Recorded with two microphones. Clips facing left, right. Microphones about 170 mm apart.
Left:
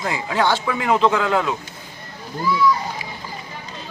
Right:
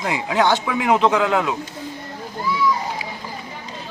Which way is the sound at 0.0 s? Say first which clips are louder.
Right 2 dB; 15° right (ahead or behind).